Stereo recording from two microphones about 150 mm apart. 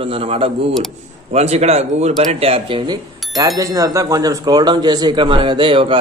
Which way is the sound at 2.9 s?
25° right (ahead or behind).